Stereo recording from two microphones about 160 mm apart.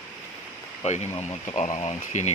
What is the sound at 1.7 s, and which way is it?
Speech, 45° left (ahead or behind).